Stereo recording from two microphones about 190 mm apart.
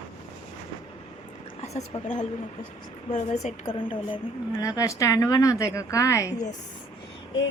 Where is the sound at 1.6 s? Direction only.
35° left (ahead or behind); by 6.3 s 15° left (ahead or behind).